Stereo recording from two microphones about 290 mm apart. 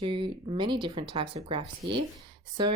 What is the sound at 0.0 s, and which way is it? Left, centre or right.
Speech, centre.